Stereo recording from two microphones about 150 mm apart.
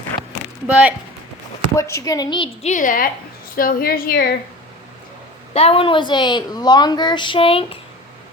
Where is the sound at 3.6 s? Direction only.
75° left (ahead or behind).